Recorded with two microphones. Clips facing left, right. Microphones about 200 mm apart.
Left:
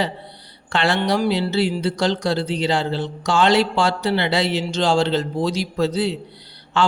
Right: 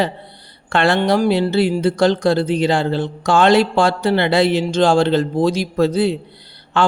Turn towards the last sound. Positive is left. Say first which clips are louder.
# right 3 dB
turn(degrees=-55)  # may be behind; listen again after turning